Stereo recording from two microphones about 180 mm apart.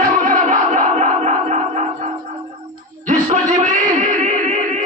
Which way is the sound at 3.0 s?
40° right (ahead or behind).